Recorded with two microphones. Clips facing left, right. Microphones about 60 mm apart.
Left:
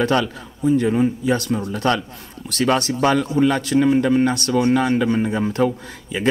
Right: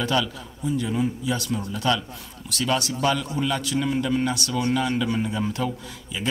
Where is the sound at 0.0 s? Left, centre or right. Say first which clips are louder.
Left 5 dB; left.